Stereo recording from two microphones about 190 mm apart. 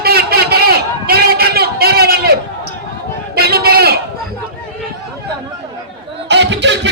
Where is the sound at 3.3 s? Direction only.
55° right (ahead or behind).